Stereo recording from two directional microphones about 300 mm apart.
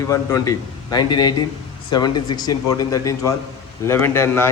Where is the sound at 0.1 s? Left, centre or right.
Centre.